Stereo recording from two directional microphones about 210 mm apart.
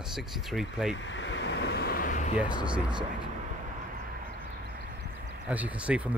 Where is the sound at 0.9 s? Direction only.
60° left (ahead or behind); by 2.4 s 40° left (ahead or behind).